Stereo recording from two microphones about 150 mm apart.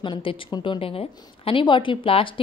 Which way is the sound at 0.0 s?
35° left (ahead or behind).